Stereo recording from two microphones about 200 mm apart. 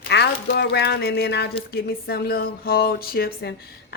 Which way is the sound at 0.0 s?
50° left (ahead or behind).